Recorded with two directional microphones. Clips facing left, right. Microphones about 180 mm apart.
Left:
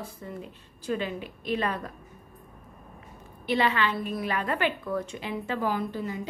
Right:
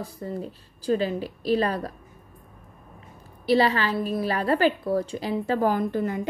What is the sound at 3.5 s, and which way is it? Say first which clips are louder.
A woman's voice: right 4 dB; 35° right (ahead or behind).